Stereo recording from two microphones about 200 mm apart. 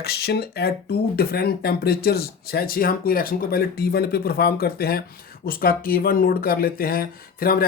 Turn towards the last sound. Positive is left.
turn(degrees=45)  # may be behind; listen again after turning